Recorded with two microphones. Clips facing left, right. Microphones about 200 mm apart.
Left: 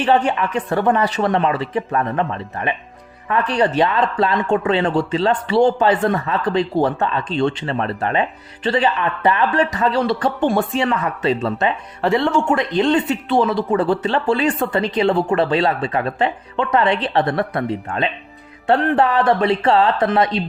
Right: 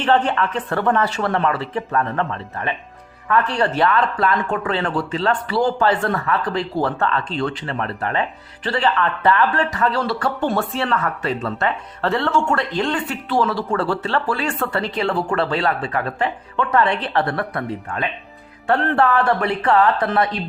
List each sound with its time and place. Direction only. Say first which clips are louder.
0.0 s speech: left 1 dB; 15° left (ahead or behind)